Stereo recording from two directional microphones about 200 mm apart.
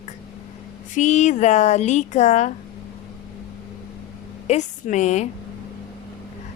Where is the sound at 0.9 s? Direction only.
35° left (ahead or behind).